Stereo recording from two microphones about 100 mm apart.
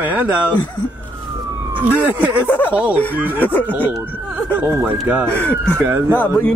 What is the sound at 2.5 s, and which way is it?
Speech, 15° left (ahead or behind).